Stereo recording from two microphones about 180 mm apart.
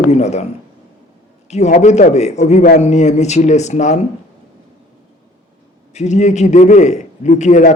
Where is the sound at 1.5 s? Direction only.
40° left (ahead or behind).